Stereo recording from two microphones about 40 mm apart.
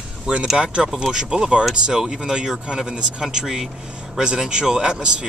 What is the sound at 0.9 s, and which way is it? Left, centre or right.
Speech, centre.